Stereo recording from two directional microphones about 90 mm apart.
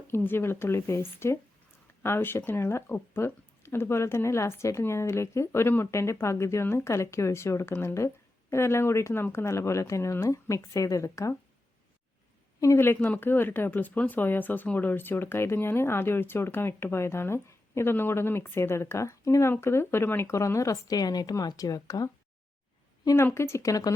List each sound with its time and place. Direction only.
0.1 s speech: 25° left (ahead or behind)
12.5 s speech: 30° left (ahead or behind)
23.1 s speech: 30° left (ahead or behind)